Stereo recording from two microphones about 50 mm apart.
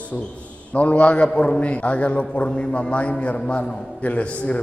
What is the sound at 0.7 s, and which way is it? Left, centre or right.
A man's voice, left.